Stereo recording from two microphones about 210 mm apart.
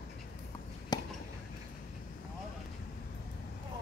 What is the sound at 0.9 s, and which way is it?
Chop, 20° left (ahead or behind).